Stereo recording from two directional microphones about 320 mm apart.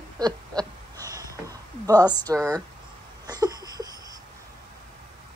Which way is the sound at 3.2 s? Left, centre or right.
Centre.